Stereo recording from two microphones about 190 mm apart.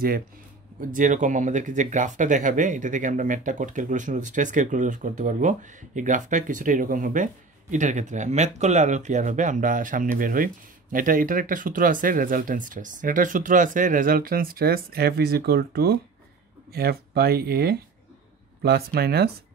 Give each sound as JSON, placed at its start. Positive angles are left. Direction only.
{"t": 0.7, "sound": "speech", "side_deg": -45}